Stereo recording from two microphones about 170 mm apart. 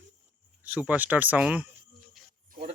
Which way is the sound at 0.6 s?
10° right (ahead or behind).